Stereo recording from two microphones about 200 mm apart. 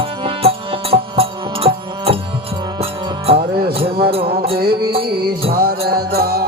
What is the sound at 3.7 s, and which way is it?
Music, 30° right (ahead or behind).